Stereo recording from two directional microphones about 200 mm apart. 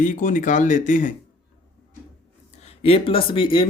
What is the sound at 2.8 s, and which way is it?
Speech, 30° left (ahead or behind).